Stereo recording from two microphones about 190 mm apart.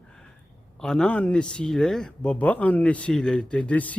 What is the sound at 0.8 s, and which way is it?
Speech, 5° left (ahead or behind).